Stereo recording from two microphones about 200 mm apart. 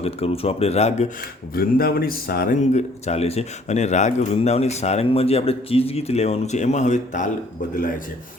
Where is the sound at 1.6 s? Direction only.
50° left (ahead or behind).